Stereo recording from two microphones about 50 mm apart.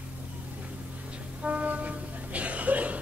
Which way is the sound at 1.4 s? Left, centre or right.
Right.